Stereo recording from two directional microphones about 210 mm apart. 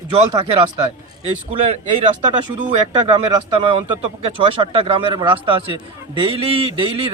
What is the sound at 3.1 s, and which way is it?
A man's voice, 25° right (ahead or behind).